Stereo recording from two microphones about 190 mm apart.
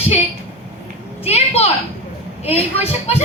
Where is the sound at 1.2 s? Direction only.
35° left (ahead or behind).